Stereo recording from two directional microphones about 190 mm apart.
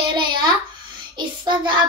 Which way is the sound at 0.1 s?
25° right (ahead or behind).